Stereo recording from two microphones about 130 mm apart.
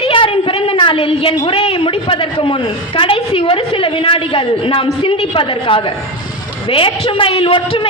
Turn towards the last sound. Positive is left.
turn(degrees=40)  # may be behind; listen again after turning